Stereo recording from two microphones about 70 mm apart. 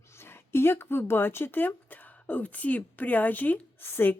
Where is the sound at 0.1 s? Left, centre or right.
Left.